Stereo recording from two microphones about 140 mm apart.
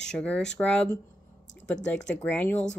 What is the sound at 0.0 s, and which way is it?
A woman's voice, 5° left (ahead or behind).